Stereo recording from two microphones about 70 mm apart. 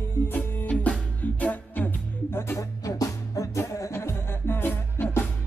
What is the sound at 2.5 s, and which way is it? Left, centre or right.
Music, left.